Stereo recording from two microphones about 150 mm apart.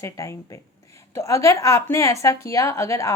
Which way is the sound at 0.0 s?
20° left (ahead or behind).